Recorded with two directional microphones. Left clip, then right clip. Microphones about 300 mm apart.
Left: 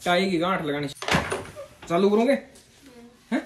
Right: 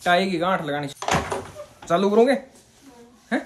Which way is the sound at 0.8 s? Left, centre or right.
Right.